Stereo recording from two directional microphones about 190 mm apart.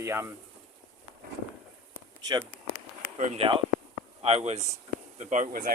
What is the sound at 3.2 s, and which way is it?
Speech, 35° right (ahead or behind).